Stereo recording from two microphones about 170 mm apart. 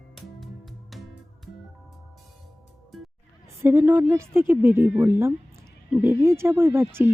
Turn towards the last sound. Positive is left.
turn(degrees=-15)  # may be behind; listen again after turning